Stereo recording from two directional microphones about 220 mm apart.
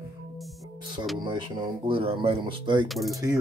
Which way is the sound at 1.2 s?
20° right (ahead or behind).